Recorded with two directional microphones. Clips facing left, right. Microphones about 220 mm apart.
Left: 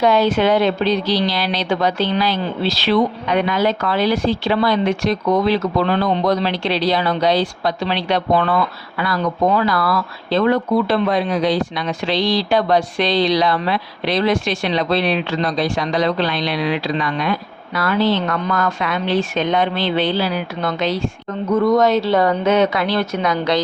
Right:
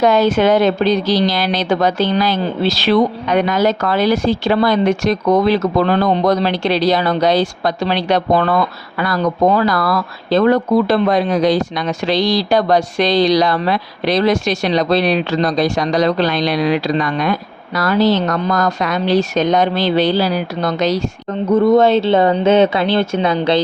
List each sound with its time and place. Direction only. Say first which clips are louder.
0.0 s a woman's voice: right 3 dB; 45° right (ahead or behind)
21.5 s speech: right 4 dB; 30° right (ahead or behind)